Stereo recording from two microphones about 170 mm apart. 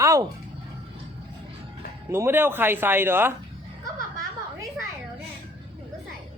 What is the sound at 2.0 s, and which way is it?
A man's voice, 15° right (ahead or behind).